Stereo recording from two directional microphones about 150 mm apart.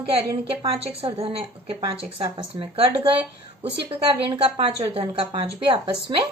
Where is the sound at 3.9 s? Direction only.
40° right (ahead or behind).